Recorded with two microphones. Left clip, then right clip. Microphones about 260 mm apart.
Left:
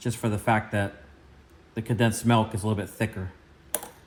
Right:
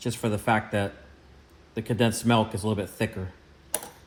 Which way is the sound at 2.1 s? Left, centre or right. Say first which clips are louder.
Left 1 dB; left.